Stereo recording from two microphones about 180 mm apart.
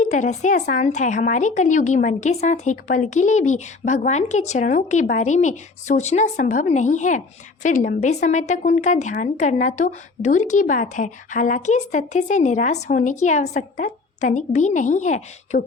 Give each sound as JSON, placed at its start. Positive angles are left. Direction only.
{"t": 0.0, "sound": "a woman's voice", "side_deg": 40}